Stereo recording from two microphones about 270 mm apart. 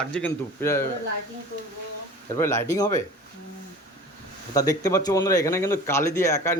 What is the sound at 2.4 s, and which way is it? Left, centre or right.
Speech, centre.